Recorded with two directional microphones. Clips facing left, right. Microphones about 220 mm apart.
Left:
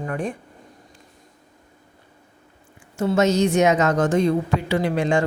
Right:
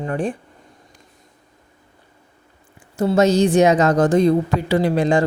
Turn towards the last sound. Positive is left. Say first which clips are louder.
# right 4 dB
turn(degrees=-35)  # may be behind; listen again after turning